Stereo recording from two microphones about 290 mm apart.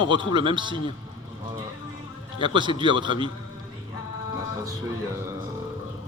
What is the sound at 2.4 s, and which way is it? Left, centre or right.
Speech, centre.